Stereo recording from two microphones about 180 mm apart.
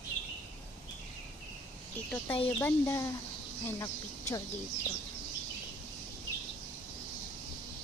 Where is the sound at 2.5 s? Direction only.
10° left (ahead or behind).